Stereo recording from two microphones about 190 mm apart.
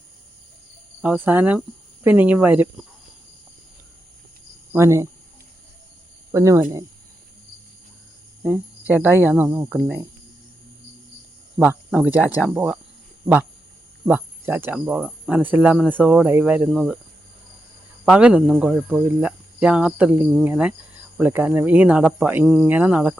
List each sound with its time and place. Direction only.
1.0 s speech: 10° right (ahead or behind)
4.7 s speech: 15° right (ahead or behind)
6.3 s speech: 15° right (ahead or behind)
8.9 s speech: 10° right (ahead or behind)
11.6 s speech: 10° right (ahead or behind)
14.1 s speech: 10° right (ahead or behind)
18.0 s speech: 5° right (ahead or behind)